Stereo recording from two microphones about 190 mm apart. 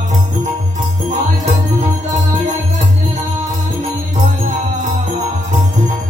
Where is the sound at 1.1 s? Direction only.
35° right (ahead or behind).